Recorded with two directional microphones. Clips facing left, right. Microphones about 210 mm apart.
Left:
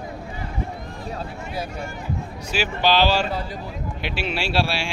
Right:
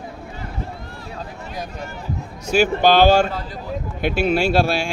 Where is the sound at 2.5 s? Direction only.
50° right (ahead or behind).